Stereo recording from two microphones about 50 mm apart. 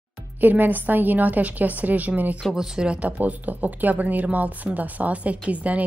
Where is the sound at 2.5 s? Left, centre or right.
Centre.